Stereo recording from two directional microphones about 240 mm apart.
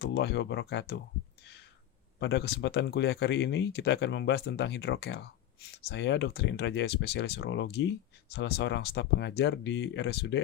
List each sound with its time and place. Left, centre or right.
0.0 s speech: left
2.1 s speech: left